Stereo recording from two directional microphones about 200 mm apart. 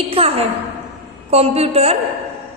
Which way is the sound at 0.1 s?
30° right (ahead or behind).